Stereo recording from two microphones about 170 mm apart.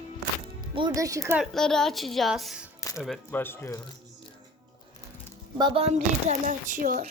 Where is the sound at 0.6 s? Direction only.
30° right (ahead or behind).